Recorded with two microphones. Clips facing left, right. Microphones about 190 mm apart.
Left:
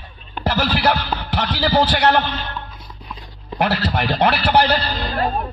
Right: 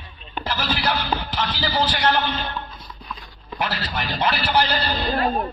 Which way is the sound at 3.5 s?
60° left (ahead or behind).